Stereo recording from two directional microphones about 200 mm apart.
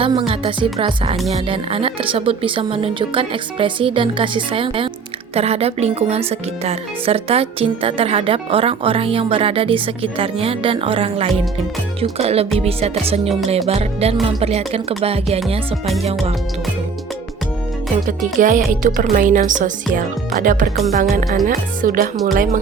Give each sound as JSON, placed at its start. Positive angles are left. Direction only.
{"t": 0.0, "sound": "a woman's voice", "side_deg": -25}
{"t": 5.3, "sound": "music", "side_deg": -30}
{"t": 6.7, "sound": "a woman's voice", "side_deg": -30}
{"t": 11.9, "sound": "music", "side_deg": -30}
{"t": 12.5, "sound": "a woman's voice", "side_deg": -30}
{"t": 13.7, "sound": "music", "side_deg": -30}
{"t": 18.0, "sound": "music", "side_deg": -40}
{"t": 20.4, "sound": "speech", "side_deg": -40}